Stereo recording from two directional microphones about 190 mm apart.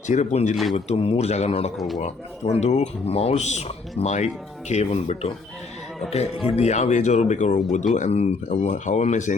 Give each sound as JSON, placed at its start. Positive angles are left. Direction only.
{"t": 0.1, "sound": "speech", "side_deg": 40}
{"t": 0.5, "sound": "a man's voice", "side_deg": 0}
{"t": 0.9, "sound": "speech", "side_deg": 30}